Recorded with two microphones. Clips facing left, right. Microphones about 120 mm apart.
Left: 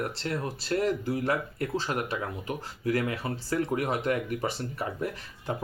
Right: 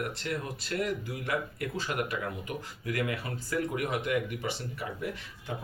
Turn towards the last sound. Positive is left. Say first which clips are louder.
# left 2 dB
turn(degrees=40)  # may be behind; listen again after turning